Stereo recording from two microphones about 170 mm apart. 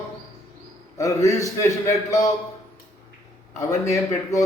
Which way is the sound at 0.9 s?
20° left (ahead or behind).